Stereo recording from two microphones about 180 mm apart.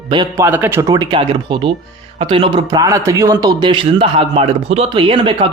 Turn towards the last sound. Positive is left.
turn(degrees=-30)  # may be behind; listen again after turning